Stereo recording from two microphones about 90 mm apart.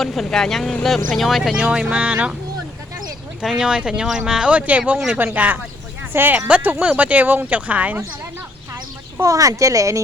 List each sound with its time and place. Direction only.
0.0 s speech: 5° left (ahead or behind)
1.7 s speech: 10° right (ahead or behind)
3.4 s speech: 10° right (ahead or behind)
8.7 s speech: 35° right (ahead or behind)